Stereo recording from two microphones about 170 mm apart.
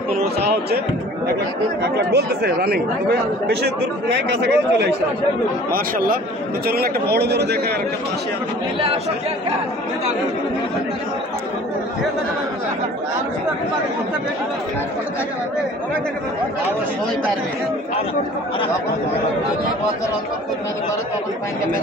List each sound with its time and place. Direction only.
0.4 s speech: 70° right (ahead or behind)
1.8 s speech: 80° right
5.7 s a man's voice: 60° right (ahead or behind)